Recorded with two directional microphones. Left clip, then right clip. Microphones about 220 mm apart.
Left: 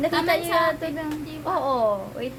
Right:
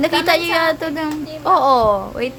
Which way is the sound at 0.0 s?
40° right (ahead or behind).